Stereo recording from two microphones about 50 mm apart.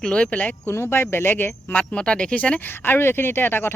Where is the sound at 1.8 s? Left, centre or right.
Centre.